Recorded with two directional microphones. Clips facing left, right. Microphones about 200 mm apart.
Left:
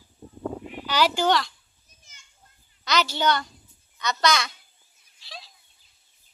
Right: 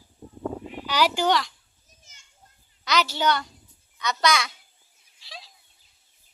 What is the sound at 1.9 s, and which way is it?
Children playing, 40° right (ahead or behind).